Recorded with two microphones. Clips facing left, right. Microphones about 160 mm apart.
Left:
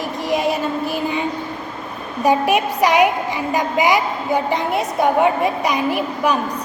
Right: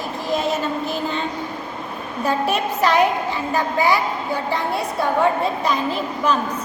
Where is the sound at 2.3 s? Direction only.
15° left (ahead or behind).